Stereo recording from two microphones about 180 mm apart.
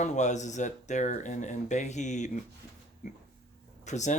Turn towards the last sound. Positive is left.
turn(degrees=40)  # may be behind; listen again after turning